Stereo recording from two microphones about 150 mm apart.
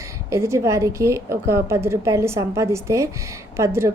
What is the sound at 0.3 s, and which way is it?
A woman's voice, 20° right (ahead or behind).